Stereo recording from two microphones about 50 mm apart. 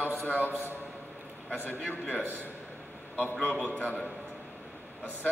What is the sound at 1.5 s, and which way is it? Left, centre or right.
A man's voice, left.